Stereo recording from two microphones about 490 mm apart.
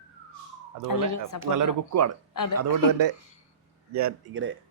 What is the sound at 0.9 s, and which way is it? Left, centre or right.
Speech, left.